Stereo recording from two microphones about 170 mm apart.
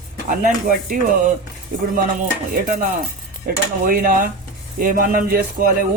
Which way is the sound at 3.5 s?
55° right (ahead or behind).